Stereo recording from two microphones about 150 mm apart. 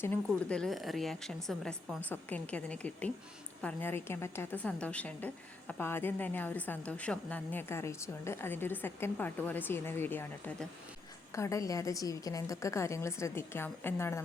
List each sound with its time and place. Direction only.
0.0 s a woman's voice: 10° left (ahead or behind)